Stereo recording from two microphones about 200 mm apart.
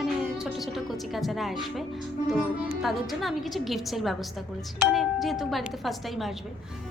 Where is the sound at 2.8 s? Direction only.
Centre (ahead or behind).